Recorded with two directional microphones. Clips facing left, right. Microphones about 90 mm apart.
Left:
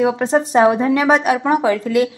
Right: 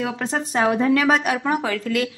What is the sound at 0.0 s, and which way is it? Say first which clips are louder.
A woman's voice: left 9 dB; 25° left (ahead or behind).